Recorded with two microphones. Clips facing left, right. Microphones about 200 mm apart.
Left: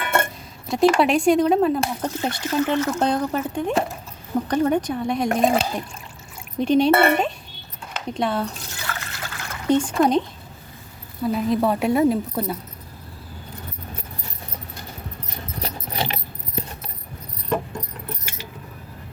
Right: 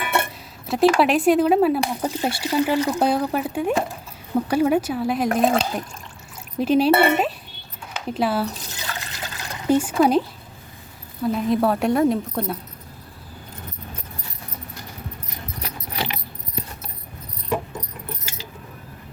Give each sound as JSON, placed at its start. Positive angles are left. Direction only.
{"t": 0.7, "sound": "speech", "side_deg": 0}
{"t": 6.9, "sound": "speech", "side_deg": -15}
{"t": 8.0, "sound": "speech", "side_deg": -5}
{"t": 8.8, "sound": "trickle", "side_deg": -15}
{"t": 9.6, "sound": "speech", "side_deg": -5}
{"t": 15.6, "sound": "keys jangling", "side_deg": 30}